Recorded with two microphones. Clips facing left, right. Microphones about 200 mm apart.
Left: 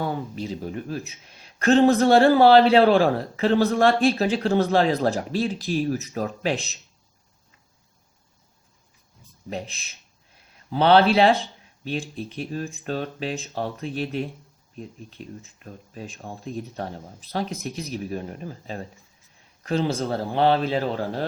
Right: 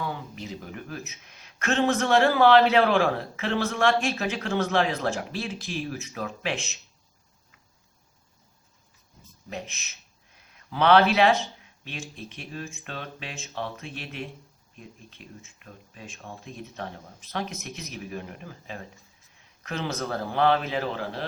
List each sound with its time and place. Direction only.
0.0 s speech: 35° left (ahead or behind)
9.5 s speech: 35° left (ahead or behind)